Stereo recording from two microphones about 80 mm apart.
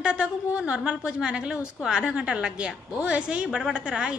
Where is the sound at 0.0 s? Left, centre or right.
Centre.